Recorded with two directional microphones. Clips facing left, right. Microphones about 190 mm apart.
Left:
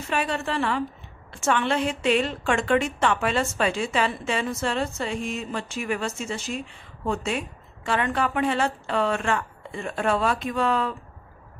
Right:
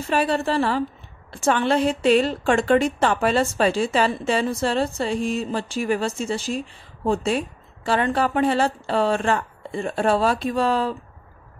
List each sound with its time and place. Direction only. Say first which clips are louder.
0.1 s a woman's voice: right 5 dB; 35° right (ahead or behind)